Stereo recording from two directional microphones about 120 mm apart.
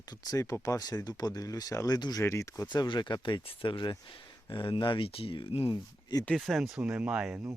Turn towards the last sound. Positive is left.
turn(degrees=-10)  # may be behind; listen again after turning